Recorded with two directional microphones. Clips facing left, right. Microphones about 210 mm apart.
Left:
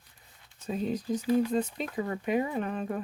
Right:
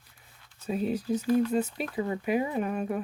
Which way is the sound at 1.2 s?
10° left (ahead or behind).